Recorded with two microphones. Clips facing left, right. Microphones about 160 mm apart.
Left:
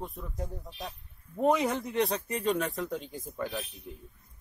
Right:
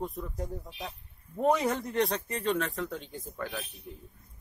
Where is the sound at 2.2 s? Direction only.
10° left (ahead or behind).